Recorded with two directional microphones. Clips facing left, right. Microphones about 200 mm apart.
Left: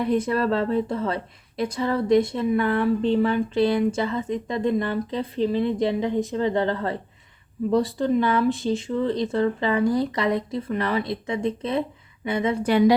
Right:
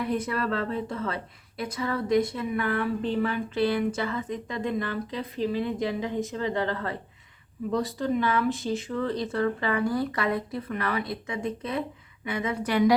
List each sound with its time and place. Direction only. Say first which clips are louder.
0.0 s speech: left 6 dB; 25° left (ahead or behind)